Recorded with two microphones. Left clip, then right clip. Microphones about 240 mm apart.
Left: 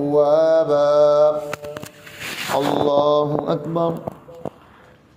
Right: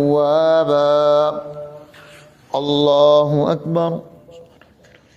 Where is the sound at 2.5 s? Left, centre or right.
Right.